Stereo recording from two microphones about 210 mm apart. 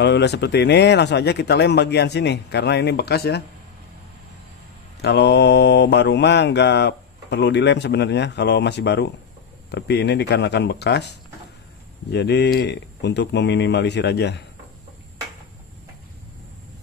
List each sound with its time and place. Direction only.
0.0 s speech: 55° left (ahead or behind)
5.0 s mantra: 55° left (ahead or behind)
9.7 s speech: 55° left (ahead or behind)
12.1 s mantra: 55° left (ahead or behind)